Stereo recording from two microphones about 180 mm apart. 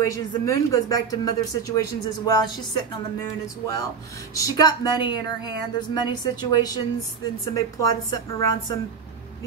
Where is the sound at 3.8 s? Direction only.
20° left (ahead or behind).